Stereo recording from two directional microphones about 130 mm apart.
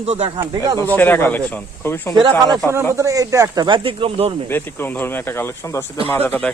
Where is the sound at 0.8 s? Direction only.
15° left (ahead or behind).